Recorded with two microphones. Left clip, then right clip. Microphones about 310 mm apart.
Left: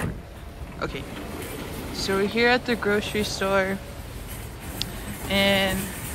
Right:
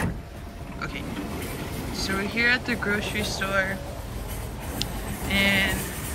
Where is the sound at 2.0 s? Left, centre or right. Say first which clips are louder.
Left 2 dB; centre.